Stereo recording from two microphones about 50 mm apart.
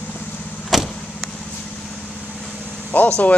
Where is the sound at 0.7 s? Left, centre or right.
Centre.